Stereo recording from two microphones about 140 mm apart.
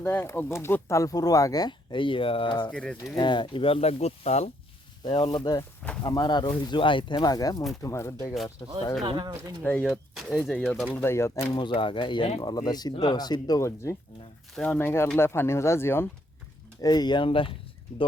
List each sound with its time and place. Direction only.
0.0 s speech: 15° left (ahead or behind); by 2.6 s 35° left (ahead or behind)
2.6 s speech: 5° left (ahead or behind)
3.2 s speech: 35° left (ahead or behind); by 4.4 s 50° left (ahead or behind)
5.0 s speech: 30° left (ahead or behind)
9.0 s speech: 30° right (ahead or behind)
9.6 s speech: 10° left (ahead or behind)
10.9 s speech: 15° left (ahead or behind)
11.5 s speech: 40° left (ahead or behind); by 13.9 s 20° left (ahead or behind)
14.5 s speech: 10° left (ahead or behind)
16.8 s speech: 30° left (ahead or behind)